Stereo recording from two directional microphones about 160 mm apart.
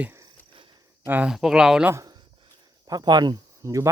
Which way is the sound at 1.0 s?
10° right (ahead or behind).